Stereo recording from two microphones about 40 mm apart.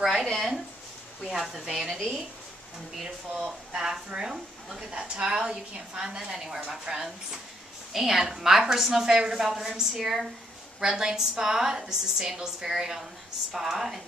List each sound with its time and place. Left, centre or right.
0.0 s a sound: centre
1.2 s speech: centre
3.4 s a woman's voice: centre